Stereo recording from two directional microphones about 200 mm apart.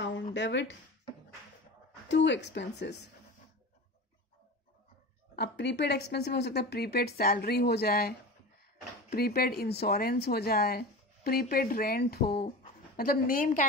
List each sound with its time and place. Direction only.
0.0 s a sound: 65° left (ahead or behind)
2.0 s a woman's voice: 60° left (ahead or behind)
5.3 s a woman's voice: 55° left (ahead or behind)